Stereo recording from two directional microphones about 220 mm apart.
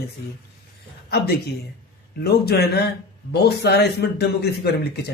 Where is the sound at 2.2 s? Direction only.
45° left (ahead or behind).